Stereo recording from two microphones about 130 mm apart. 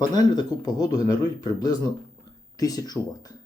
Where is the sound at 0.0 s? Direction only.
30° left (ahead or behind).